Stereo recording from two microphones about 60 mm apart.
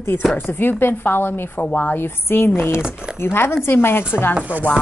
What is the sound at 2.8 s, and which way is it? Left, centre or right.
Speech, centre.